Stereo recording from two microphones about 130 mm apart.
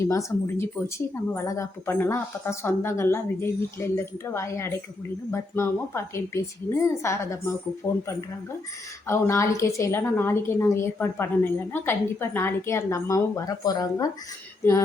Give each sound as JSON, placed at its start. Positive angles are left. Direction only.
{"t": 0.0, "sound": "speech", "side_deg": 25}
{"t": 9.0, "sound": "speech", "side_deg": 20}